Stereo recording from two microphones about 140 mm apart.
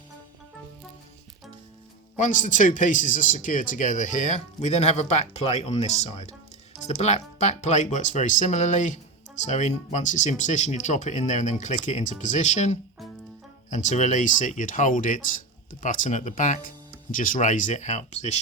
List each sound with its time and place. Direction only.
2.1 s speech: 65° left (ahead or behind)